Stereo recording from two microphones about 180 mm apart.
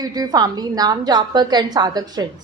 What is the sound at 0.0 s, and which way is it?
A woman's voice, 20° right (ahead or behind).